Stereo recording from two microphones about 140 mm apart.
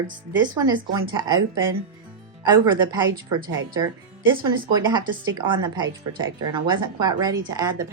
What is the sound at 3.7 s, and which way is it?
A woman's voice, 30° right (ahead or behind).